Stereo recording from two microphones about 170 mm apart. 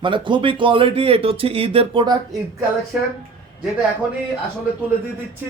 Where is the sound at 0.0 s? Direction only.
30° right (ahead or behind).